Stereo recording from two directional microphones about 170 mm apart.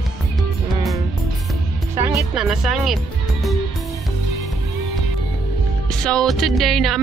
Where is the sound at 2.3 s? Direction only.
5° right (ahead or behind).